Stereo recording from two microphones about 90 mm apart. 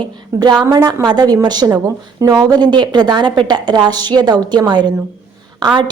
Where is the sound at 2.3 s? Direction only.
50° right (ahead or behind).